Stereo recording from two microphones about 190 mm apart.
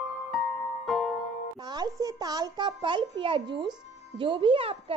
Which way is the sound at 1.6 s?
20° right (ahead or behind).